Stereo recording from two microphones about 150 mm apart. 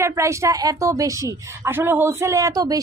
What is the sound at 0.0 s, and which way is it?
A woman's voice, 20° right (ahead or behind).